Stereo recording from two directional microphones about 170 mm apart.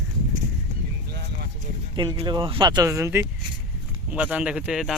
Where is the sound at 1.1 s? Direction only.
75° right (ahead or behind).